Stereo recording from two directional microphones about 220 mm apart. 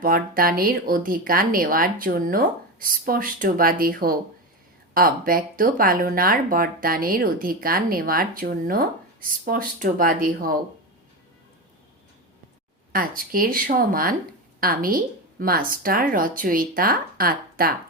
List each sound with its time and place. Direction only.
0.0 s speech: 40° right (ahead or behind)
12.9 s speech: 40° right (ahead or behind)